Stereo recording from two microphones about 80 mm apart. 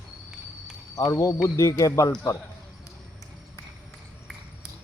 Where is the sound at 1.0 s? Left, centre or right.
Left.